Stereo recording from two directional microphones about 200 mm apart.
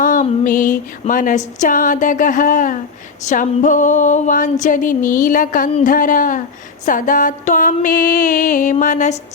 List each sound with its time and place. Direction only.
0.0 s music: 40° left (ahead or behind)